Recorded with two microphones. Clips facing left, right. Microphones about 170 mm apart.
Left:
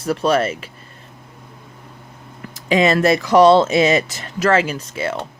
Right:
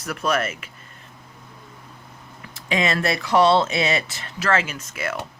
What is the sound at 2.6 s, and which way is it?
Speech, 35° left (ahead or behind).